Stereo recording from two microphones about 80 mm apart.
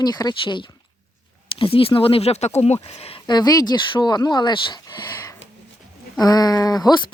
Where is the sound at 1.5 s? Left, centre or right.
Left.